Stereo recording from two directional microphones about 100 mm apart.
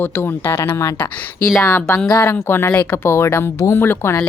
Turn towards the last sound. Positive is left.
turn(degrees=25)  # may be behind; listen again after turning